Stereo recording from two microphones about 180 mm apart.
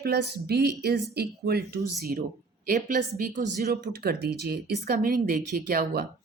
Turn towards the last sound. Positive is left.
turn(degrees=-55)  # may be behind; listen again after turning